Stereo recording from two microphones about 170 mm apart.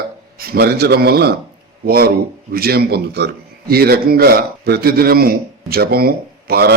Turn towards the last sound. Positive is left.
turn(degrees=-65)  # may be behind; listen again after turning